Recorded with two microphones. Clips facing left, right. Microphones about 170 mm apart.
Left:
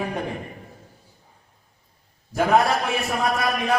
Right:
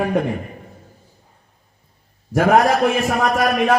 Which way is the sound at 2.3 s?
90° right.